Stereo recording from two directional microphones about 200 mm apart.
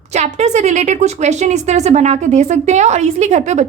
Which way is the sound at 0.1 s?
35° right (ahead or behind).